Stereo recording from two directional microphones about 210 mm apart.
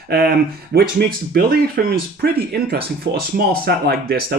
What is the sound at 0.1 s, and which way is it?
Speech, 50° right (ahead or behind).